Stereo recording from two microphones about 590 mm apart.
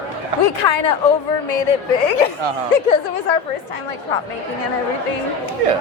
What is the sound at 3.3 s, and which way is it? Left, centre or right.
Speech, left.